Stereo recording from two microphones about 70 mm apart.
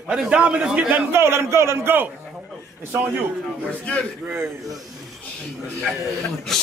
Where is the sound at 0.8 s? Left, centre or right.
Right.